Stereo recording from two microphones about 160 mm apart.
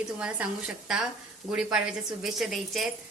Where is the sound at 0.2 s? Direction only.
5° right (ahead or behind).